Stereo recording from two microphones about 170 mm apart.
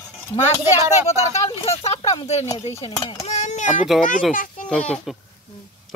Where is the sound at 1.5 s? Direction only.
35° left (ahead or behind).